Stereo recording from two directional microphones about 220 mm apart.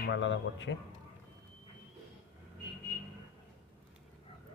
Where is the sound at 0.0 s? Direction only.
55° left (ahead or behind).